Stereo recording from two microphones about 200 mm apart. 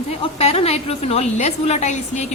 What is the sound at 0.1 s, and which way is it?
A woman's voice, 30° left (ahead or behind).